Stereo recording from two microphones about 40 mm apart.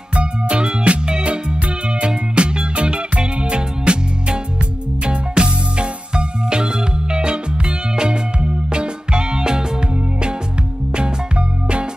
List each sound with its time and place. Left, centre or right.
0.1 s music: right
11.0 s music: right